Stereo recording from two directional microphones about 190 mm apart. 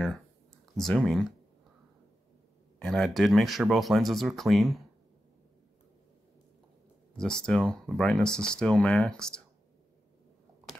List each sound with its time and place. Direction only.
0.7 s speech: centre (ahead or behind)
2.8 s speech: centre (ahead or behind)
7.2 s speech: 5° left (ahead or behind)